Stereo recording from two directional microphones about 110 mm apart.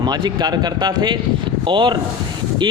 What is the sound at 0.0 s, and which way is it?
Speech, 40° right (ahead or behind).